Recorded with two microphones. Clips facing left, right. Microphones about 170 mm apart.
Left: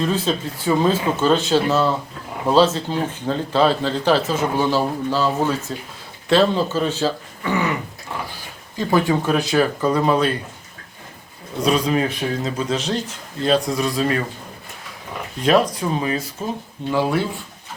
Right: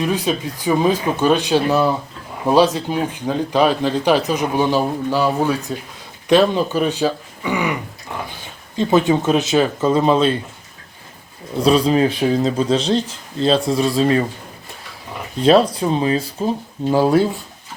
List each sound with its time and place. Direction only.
0.0 s speech: 15° right (ahead or behind)
8.8 s speech: 20° right (ahead or behind)
11.6 s speech: 30° right (ahead or behind)
15.4 s speech: 30° right (ahead or behind)
16.9 s speech: 40° right (ahead or behind)